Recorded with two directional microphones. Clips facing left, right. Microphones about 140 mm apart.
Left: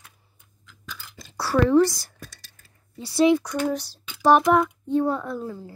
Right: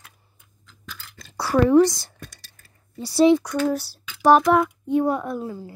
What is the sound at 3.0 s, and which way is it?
Speech, 35° right (ahead or behind).